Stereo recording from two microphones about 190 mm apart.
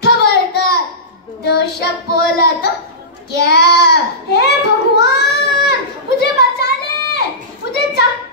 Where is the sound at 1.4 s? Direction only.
55° left (ahead or behind).